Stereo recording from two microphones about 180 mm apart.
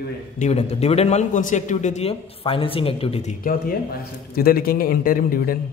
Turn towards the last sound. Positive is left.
turn(degrees=55)  # may be behind; listen again after turning